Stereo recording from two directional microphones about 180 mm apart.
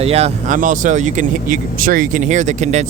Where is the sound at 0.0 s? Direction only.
35° right (ahead or behind).